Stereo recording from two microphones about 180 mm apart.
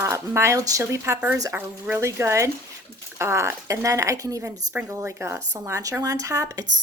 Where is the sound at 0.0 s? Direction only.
15° right (ahead or behind).